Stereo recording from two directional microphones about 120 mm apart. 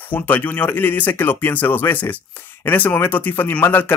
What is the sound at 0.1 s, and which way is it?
Speech, 15° left (ahead or behind).